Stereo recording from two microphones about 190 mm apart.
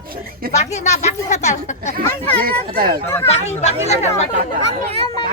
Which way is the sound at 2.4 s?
50° right (ahead or behind).